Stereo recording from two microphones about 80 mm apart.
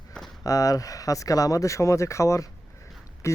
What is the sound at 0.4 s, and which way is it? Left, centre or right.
Speech, left.